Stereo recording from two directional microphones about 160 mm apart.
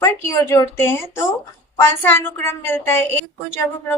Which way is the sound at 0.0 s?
15° left (ahead or behind).